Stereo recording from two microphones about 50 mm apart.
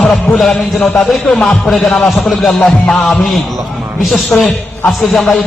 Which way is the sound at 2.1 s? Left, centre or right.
Centre.